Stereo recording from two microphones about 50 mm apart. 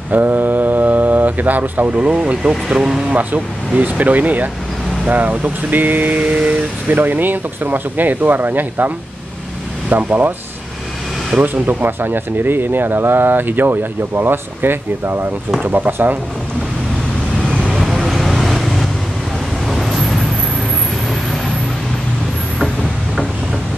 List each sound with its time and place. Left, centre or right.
0.1 s speech: right
7.0 s speech: right
11.4 s speech: right
17.7 s vehicle: centre